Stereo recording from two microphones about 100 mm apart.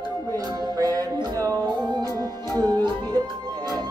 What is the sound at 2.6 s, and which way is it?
Music, 45° right (ahead or behind).